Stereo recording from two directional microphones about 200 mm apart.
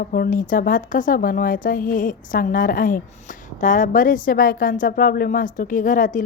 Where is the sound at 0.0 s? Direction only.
45° left (ahead or behind).